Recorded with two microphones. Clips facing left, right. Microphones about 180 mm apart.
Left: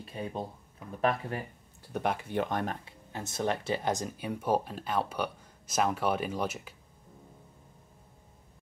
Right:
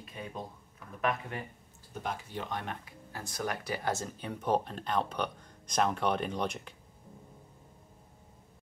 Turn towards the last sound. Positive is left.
turn(degrees=5)  # may be behind; listen again after turning